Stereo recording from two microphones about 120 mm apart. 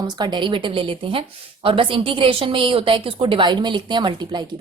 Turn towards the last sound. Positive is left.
turn(degrees=-35)  # may be behind; listen again after turning